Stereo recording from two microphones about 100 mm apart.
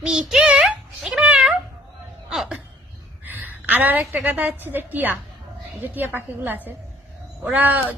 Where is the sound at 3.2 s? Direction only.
20° right (ahead or behind).